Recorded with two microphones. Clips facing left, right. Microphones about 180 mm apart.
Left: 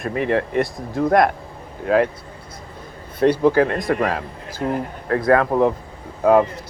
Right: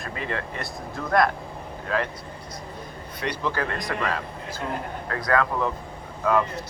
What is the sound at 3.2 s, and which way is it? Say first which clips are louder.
Speech: left 13 dB; 50° left (ahead or behind).